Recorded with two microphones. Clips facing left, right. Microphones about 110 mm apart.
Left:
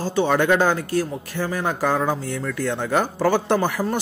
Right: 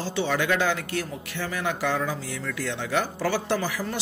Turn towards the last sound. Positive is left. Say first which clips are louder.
# left 6 dB
turn(degrees=50)  # may be behind; listen again after turning